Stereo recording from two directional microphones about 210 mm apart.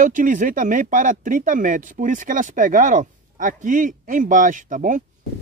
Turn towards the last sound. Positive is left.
turn(degrees=-40)  # may be behind; listen again after turning